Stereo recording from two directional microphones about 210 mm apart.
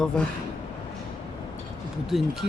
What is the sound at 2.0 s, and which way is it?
Speech, centre (ahead or behind).